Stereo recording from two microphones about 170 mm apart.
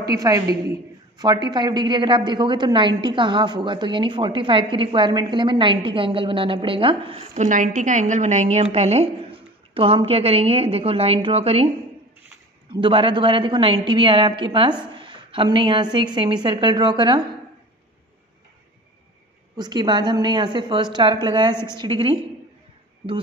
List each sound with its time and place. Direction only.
0.0 s a woman's voice: 20° right (ahead or behind)
7.4 s a woman's voice: 50° right (ahead or behind)
12.7 s a woman's voice: 30° right (ahead or behind)
19.5 s a woman's voice: 25° right (ahead or behind)